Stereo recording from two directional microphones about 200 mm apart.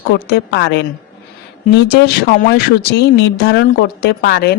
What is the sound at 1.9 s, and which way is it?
A woman's voice, 55° left (ahead or behind).